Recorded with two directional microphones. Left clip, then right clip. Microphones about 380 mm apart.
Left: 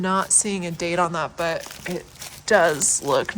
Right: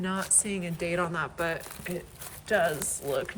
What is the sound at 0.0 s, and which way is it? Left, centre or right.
Speech, centre.